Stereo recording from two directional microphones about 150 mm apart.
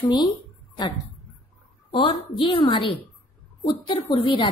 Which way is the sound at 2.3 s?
35° left (ahead or behind).